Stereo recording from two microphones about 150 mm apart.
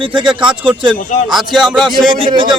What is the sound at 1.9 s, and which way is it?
Speech, 30° right (ahead or behind).